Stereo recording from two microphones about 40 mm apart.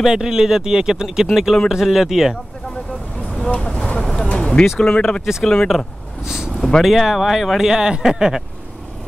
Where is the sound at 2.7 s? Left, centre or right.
Left.